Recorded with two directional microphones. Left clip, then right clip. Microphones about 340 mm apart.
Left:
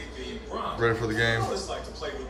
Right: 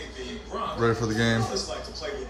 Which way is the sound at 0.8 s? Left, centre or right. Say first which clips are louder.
Even; centre.